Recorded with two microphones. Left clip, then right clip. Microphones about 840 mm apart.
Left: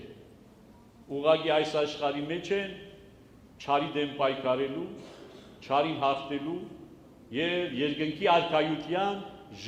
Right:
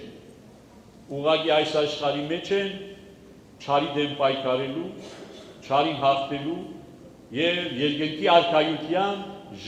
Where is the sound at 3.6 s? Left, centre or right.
Left.